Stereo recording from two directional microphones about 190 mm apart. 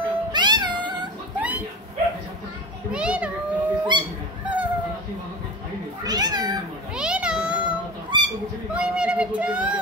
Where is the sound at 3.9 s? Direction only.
25° right (ahead or behind).